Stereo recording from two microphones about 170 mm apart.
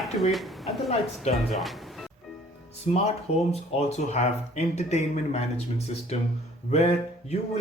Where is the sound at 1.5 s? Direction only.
Centre (ahead or behind).